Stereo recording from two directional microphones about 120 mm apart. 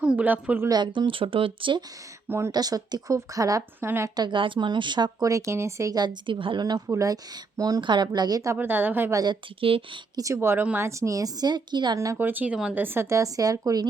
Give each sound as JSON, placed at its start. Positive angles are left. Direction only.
{"t": 0.0, "sound": "speech", "side_deg": -10}
{"t": 0.7, "sound": "speech", "side_deg": -40}
{"t": 2.5, "sound": "a woman's voice", "side_deg": -30}
{"t": 4.1, "sound": "a woman's voice", "side_deg": -40}
{"t": 8.5, "sound": "speech", "side_deg": -15}
{"t": 9.1, "sound": "speech", "side_deg": -40}
{"t": 10.2, "sound": "a woman's voice", "side_deg": -25}
{"t": 12.1, "sound": "a woman's voice", "side_deg": -15}